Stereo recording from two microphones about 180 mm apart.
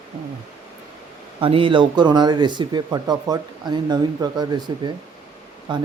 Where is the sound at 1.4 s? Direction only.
30° right (ahead or behind).